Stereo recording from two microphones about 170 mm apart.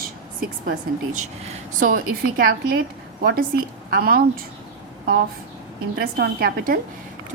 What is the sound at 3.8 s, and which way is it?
Speech, 65° right (ahead or behind).